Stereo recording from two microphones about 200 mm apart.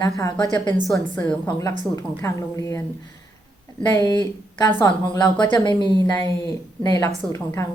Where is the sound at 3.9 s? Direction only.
20° left (ahead or behind).